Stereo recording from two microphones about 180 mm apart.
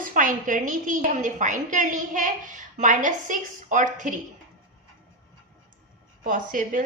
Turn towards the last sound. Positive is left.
turn(degrees=-45)  # may be behind; listen again after turning